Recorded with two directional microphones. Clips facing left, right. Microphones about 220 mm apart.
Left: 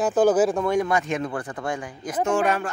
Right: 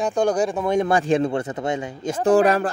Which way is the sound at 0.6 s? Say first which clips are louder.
Right 2 dB; 25° right (ahead or behind).